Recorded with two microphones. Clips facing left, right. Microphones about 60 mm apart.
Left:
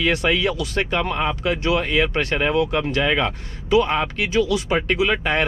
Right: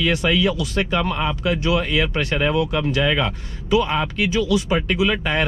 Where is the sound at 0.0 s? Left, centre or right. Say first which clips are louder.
Right 1 dB; left.